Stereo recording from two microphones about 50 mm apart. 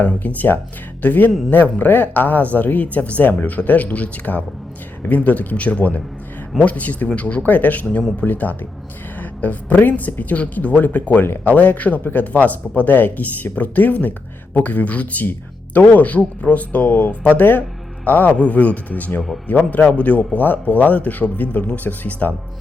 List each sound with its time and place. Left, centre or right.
0.0 s speech: left
18.3 s speech: left